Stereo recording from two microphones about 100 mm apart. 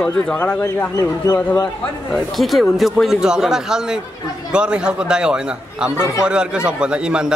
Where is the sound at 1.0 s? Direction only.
35° left (ahead or behind).